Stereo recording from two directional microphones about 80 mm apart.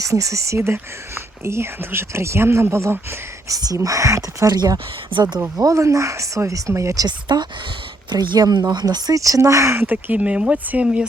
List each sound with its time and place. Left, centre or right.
0.0 s speech: right
3.5 s speech: right
4.5 s speech: right
5.5 s speech: right
9.1 s speech: right
9.8 s speech: right